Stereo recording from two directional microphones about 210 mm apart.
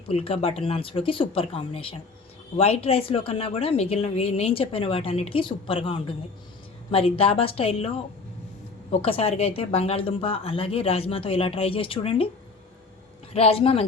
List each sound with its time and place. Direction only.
0.2 s a woman's voice: 25° left (ahead or behind)
13.3 s a woman's voice: 30° left (ahead or behind)